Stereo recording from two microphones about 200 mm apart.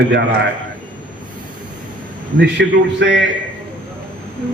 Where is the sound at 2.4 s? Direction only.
60° right (ahead or behind).